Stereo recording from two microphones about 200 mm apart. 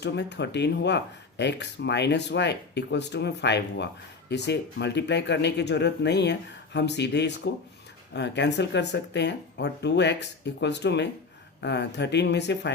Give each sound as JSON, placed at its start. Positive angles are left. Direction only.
{"t": 0.0, "sound": "speech", "side_deg": 60}